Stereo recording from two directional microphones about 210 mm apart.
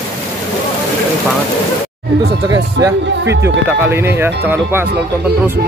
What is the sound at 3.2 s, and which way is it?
Speech, 55° right (ahead or behind).